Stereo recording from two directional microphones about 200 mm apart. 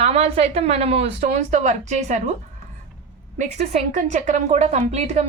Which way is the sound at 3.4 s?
35° right (ahead or behind).